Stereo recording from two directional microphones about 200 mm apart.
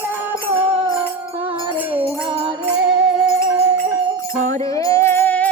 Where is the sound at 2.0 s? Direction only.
10° right (ahead or behind).